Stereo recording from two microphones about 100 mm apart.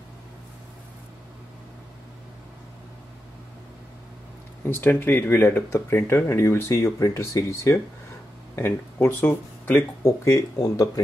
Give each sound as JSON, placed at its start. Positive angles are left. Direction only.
{"t": 4.6, "sound": "speech", "side_deg": 20}